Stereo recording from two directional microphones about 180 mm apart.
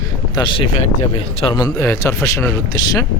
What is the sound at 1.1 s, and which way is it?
Speech, 30° left (ahead or behind).